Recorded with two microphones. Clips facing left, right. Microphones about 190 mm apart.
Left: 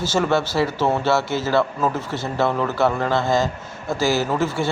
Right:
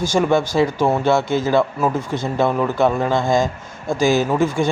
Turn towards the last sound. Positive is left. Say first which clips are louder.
# right 4 dB
turn(degrees=-15)  # may be behind; listen again after turning